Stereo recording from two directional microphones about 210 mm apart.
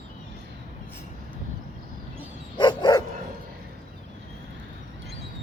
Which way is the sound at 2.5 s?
20° left (ahead or behind).